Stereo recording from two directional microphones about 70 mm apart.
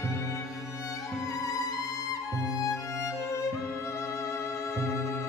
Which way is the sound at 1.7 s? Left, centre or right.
Left.